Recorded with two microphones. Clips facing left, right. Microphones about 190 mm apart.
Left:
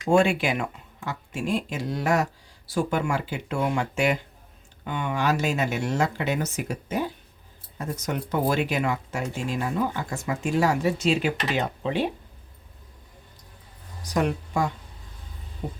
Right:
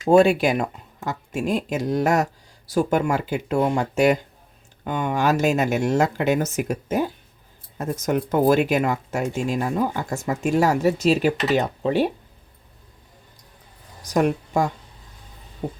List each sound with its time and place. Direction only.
0.1 s speech: 40° right (ahead or behind)
14.0 s speech: 45° right (ahead or behind)